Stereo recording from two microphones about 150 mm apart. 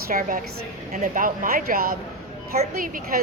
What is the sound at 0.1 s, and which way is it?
A woman's voice, 65° right (ahead or behind).